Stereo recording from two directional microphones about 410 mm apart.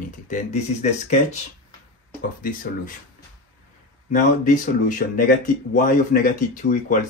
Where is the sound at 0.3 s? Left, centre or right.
Centre.